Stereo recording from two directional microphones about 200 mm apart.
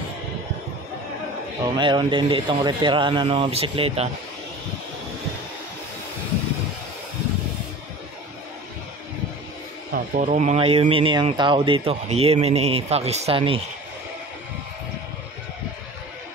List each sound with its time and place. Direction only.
1.8 s speech: 25° right (ahead or behind)
9.9 s speech: 40° right (ahead or behind)